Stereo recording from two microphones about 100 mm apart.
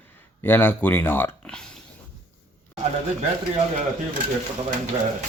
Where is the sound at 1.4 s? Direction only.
10° left (ahead or behind).